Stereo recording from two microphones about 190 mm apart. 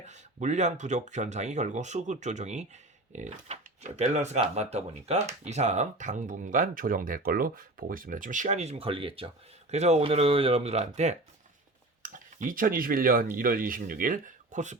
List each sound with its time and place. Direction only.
0.0 s speech: 35° right (ahead or behind)